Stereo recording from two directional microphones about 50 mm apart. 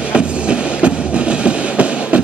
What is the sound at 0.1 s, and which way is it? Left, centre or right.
Train, right.